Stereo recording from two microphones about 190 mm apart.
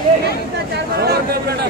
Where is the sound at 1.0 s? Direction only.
55° right (ahead or behind).